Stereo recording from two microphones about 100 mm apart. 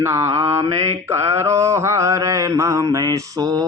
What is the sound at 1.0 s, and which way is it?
A man's voice, 30° right (ahead or behind).